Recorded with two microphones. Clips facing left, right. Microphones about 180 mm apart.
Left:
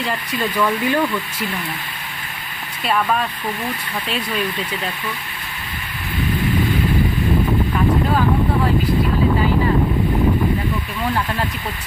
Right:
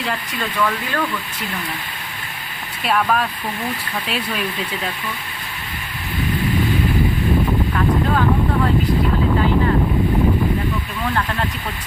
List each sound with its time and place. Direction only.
0.3 s speech: 15° left (ahead or behind)
2.8 s speech: centre (ahead or behind)